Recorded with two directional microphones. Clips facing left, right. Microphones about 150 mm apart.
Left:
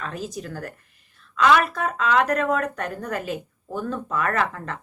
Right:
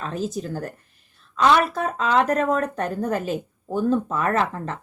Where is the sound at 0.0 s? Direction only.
30° right (ahead or behind).